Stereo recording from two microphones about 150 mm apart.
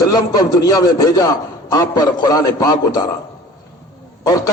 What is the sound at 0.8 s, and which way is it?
A man's voice, 25° left (ahead or behind).